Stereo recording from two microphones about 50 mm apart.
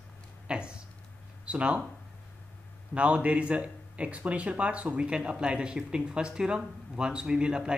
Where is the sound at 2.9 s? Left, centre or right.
Right.